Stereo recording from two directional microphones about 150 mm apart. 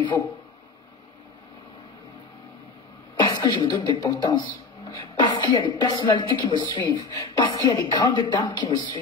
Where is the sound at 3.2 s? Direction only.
30° left (ahead or behind).